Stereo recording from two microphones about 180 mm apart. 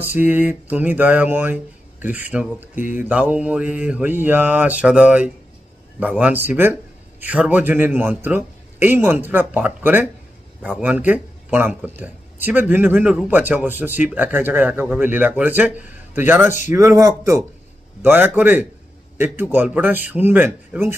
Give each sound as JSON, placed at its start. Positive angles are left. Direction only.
{"t": 0.0, "sound": "speech", "side_deg": -10}